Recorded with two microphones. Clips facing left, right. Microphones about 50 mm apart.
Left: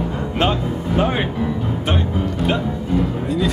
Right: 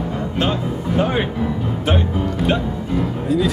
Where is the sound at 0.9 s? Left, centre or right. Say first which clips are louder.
Even; centre.